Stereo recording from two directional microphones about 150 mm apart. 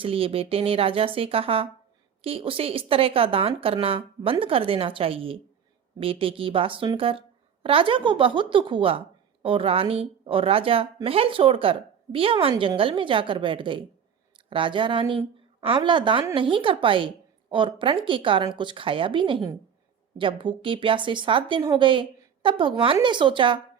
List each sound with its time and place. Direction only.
0.0 s a woman's voice: 40° right (ahead or behind)